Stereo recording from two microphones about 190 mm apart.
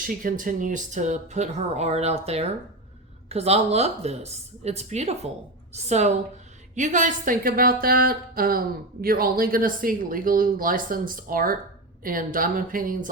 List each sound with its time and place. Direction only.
0.0 s a woman's voice: 45° right (ahead or behind)